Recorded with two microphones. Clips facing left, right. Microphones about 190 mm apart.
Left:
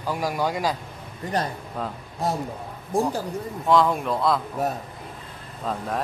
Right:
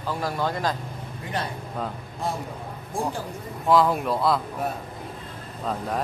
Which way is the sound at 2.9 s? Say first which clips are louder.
Left 5 dB; 40° left (ahead or behind).